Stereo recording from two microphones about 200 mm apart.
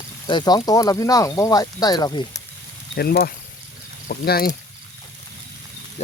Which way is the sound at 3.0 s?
50° left (ahead or behind).